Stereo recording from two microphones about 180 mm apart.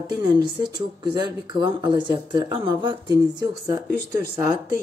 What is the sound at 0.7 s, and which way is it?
Speech, 25° right (ahead or behind).